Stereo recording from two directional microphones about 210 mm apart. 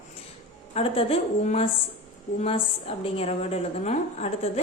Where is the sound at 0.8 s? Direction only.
30° left (ahead or behind).